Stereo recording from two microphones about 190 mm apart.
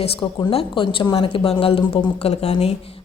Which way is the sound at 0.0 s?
25° left (ahead or behind).